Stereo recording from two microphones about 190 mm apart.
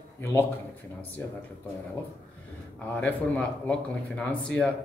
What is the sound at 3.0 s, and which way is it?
Speech, 5° left (ahead or behind).